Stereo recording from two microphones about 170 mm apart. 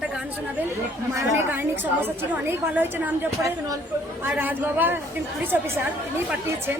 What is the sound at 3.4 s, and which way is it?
Speech, 20° right (ahead or behind).